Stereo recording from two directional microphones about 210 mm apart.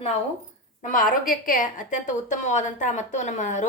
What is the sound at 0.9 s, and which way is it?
A woman's voice, 40° left (ahead or behind).